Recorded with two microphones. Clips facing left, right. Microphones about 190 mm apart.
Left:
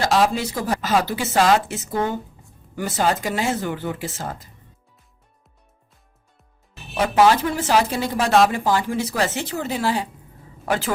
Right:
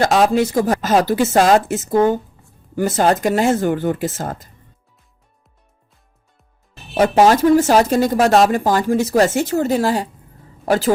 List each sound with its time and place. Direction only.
0.0 s speech: 50° right (ahead or behind)
6.9 s a woman's voice: 45° right (ahead or behind)